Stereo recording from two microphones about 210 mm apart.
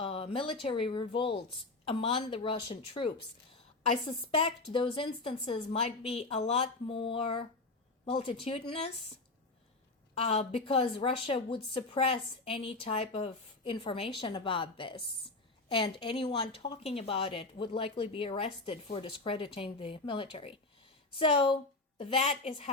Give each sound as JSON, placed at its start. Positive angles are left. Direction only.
{"t": 0.0, "sound": "speech", "side_deg": 30}
{"t": 10.2, "sound": "speech", "side_deg": 30}